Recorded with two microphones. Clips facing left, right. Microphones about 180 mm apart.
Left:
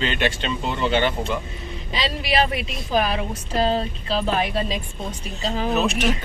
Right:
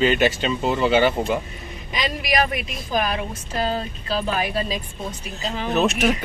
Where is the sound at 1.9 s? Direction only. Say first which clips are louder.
Even; 30° left (ahead or behind).